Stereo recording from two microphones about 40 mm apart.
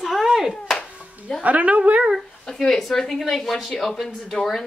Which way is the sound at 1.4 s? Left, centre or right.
Right.